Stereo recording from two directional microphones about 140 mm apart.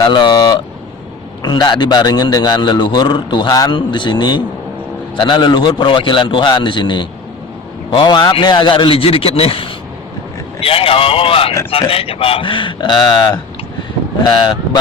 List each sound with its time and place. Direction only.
0.0 s a man's voice: 35° left (ahead or behind)